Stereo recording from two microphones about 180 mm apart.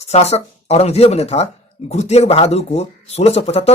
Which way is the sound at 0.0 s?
35° left (ahead or behind).